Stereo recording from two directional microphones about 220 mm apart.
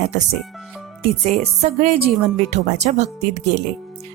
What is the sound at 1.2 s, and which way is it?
A woman's voice, 30° right (ahead or behind).